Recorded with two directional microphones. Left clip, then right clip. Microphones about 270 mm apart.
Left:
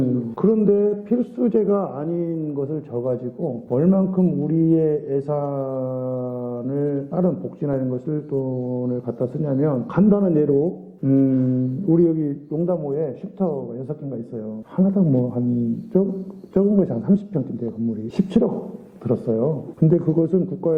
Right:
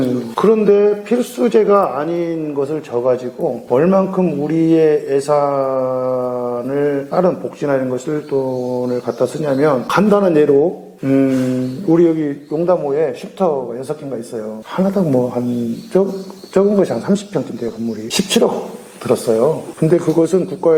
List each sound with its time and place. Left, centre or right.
0.0 s mantra: centre
8.4 s mantra: right
16.6 s mantra: centre
18.1 s speech: centre
19.0 s mantra: centre